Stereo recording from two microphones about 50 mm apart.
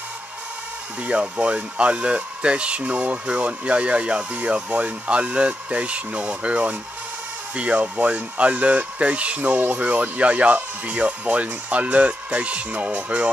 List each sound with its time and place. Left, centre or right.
1.0 s speech: right